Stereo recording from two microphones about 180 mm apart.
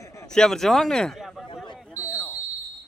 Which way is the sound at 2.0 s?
5° right (ahead or behind).